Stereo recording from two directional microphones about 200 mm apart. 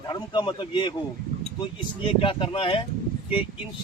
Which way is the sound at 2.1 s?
25° left (ahead or behind).